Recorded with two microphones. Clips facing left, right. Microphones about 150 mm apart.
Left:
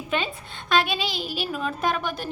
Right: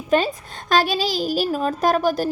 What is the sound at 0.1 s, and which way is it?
A woman's voice, 40° right (ahead or behind).